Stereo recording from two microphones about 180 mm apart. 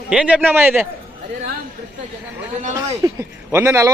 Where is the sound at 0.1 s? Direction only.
5° right (ahead or behind).